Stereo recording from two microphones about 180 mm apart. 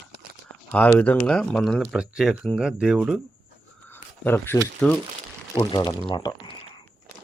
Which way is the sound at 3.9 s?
10° left (ahead or behind).